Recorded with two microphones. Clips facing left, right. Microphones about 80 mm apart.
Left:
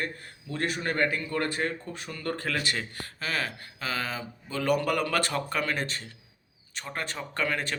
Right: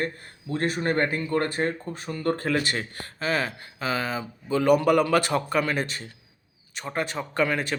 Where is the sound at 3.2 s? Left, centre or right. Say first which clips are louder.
Right 6 dB; right.